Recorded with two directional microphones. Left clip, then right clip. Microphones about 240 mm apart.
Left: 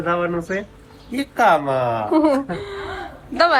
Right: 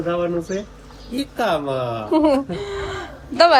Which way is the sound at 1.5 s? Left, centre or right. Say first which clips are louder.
Left 4 dB; left.